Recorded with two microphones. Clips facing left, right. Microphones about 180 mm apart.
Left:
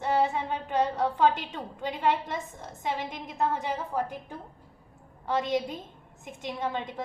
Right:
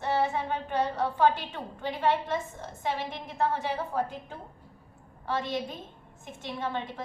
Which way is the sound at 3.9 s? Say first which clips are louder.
Even; 15° left (ahead or behind).